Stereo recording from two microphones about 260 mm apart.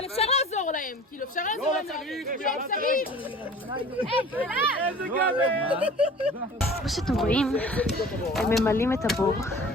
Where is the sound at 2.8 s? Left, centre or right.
Left.